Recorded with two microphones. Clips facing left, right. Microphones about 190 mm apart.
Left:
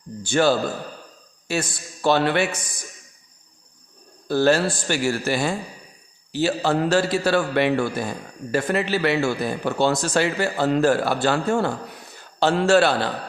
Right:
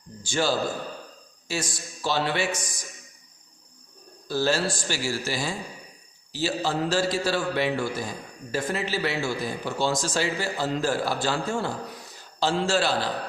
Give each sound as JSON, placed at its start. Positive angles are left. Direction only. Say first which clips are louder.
{"t": 0.2, "sound": "a man's voice", "louder": "left 6 dB", "side_deg": 60}
{"t": 4.3, "sound": "a man's voice", "louder": "left 6 dB", "side_deg": 60}